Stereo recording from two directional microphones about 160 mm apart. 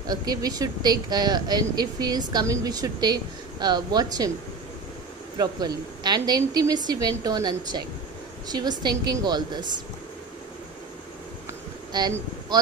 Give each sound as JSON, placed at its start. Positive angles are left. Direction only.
{"t": 0.0, "sound": "speech", "side_deg": -25}
{"t": 5.4, "sound": "speech", "side_deg": -25}
{"t": 11.9, "sound": "speech", "side_deg": -25}